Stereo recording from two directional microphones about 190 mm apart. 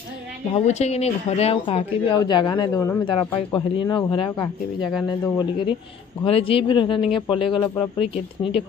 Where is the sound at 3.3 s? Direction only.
25° left (ahead or behind).